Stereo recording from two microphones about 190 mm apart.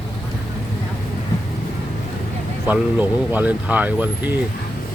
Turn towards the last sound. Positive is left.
turn(degrees=-10)  # may be behind; listen again after turning